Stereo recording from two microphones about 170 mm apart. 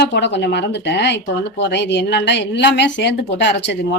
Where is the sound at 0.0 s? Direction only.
85° left.